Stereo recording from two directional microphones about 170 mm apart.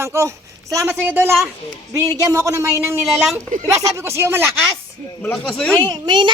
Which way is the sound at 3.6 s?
15° right (ahead or behind).